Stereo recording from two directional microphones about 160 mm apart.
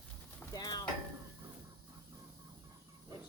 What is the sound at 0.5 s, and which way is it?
Stir, 25° left (ahead or behind).